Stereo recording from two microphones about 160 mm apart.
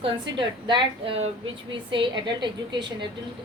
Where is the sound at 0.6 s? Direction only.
30° right (ahead or behind).